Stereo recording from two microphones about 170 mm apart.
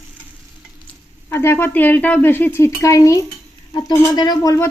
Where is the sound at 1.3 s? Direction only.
15° left (ahead or behind).